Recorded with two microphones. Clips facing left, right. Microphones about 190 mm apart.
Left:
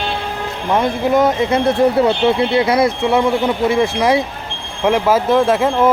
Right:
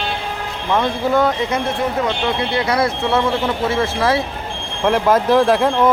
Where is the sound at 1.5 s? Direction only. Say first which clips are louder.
Left 7 dB; 30° left (ahead or behind).